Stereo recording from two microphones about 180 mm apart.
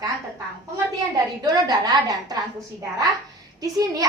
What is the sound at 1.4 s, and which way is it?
Speech, 20° right (ahead or behind).